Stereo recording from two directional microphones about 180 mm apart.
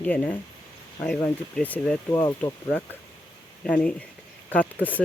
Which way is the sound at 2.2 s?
20° left (ahead or behind).